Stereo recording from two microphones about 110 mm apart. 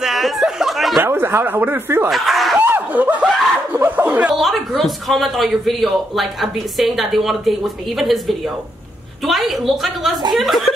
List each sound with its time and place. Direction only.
0.0 s a sound: centre (ahead or behind)
1.0 s speech: 20° right (ahead or behind)
2.0 s snicker: centre (ahead or behind)
2.6 s snicker: 15° right (ahead or behind)
3.7 s speech: 15° right (ahead or behind)
4.4 s a man's voice: centre (ahead or behind)